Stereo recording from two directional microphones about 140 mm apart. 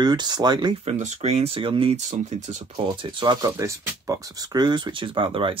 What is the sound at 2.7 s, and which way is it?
Speech, 40° right (ahead or behind).